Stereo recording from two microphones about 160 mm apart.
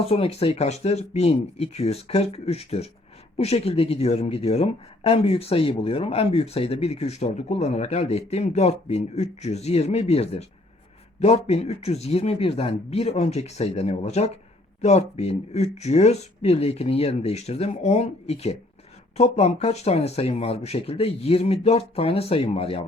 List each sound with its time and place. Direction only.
0.0 s speech: 40° left (ahead or behind)